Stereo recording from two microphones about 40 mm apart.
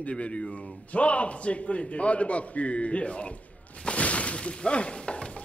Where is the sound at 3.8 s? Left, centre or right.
Left.